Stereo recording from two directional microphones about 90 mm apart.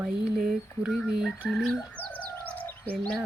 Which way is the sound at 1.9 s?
20° left (ahead or behind).